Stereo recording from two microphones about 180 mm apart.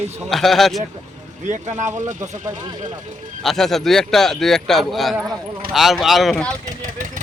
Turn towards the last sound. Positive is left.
turn(degrees=-45)  # may be behind; listen again after turning